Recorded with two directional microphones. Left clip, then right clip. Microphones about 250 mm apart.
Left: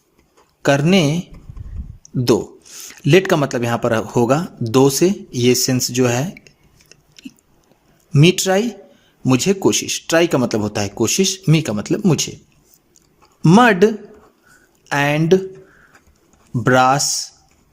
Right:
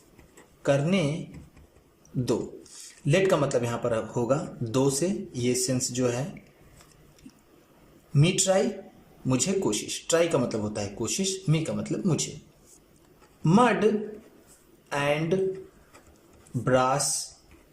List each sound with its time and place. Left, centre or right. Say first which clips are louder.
0.6 s speech: left 10 dB; left
3.0 s speech: left 9 dB; left
8.1 s speech: left 9 dB; left
13.4 s speech: left 10 dB; left
16.6 s speech: left 10 dB; left